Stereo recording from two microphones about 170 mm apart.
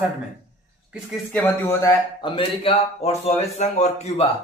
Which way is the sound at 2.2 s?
30° left (ahead or behind).